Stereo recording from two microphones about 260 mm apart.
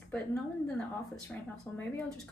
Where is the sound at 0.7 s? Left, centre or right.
Centre.